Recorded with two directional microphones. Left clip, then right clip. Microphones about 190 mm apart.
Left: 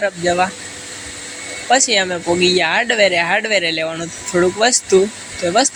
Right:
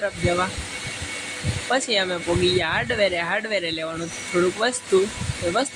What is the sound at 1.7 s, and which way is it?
Speech, 15° left (ahead or behind).